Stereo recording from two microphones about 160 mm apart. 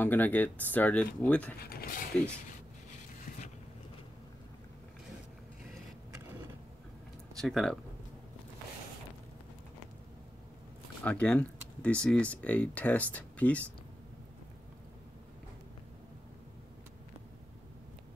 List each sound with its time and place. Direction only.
0.0 s speech: 10° left (ahead or behind)
1.6 s speech: 70° left (ahead or behind)
7.3 s speech: centre (ahead or behind)
11.1 s speech: 10° left (ahead or behind)